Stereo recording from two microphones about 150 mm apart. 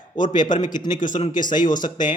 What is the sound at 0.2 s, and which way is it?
Speech, 60° left (ahead or behind).